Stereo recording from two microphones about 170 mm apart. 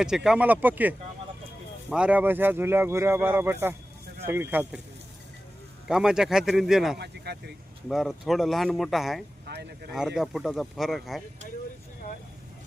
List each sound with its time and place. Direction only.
0.0 s speech: 5° right (ahead or behind)
5.9 s speech: 5° right (ahead or behind)
7.0 s speech: 75° right (ahead or behind)
7.9 s speech: centre (ahead or behind)
9.5 s speech: 75° right (ahead or behind)
10.2 s speech: centre (ahead or behind)